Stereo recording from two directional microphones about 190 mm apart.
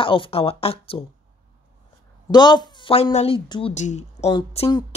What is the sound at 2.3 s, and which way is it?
Speech, 25° left (ahead or behind).